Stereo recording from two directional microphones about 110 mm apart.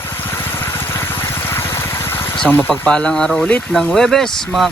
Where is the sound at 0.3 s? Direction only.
20° left (ahead or behind).